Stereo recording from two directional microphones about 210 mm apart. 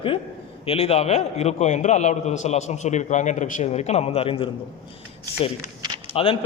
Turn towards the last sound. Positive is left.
turn(degrees=25)  # may be behind; listen again after turning